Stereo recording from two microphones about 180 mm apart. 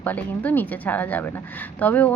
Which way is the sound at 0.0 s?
10° left (ahead or behind).